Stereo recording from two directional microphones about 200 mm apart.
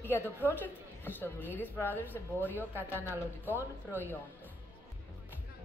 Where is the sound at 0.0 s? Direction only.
10° left (ahead or behind).